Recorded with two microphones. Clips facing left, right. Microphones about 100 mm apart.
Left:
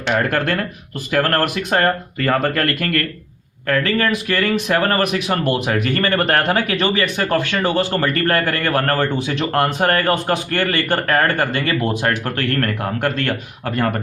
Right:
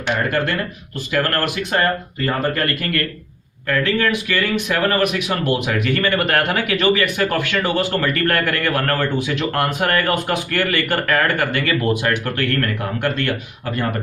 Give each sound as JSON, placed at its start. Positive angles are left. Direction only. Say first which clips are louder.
{"t": 0.3, "sound": "speech", "louder": "left 1 dB", "side_deg": 50}
{"t": 2.1, "sound": "speech", "louder": "left 2 dB", "side_deg": 75}
{"t": 3.7, "sound": "speech", "louder": "left 1 dB", "side_deg": 40}